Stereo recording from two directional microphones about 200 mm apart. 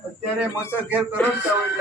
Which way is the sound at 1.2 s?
10° left (ahead or behind).